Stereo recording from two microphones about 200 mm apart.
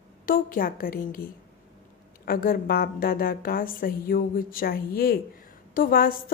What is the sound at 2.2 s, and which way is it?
A woman's voice, 45° left (ahead or behind).